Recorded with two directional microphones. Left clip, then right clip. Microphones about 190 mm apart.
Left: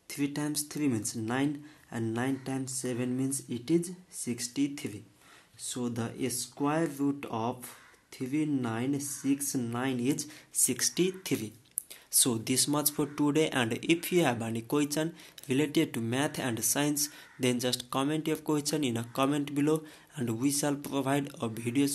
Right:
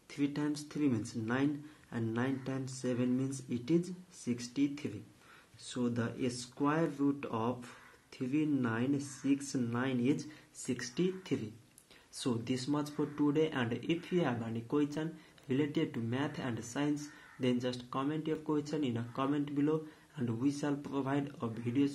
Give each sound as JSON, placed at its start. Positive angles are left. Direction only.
{"t": 0.1, "sound": "speech", "side_deg": 35}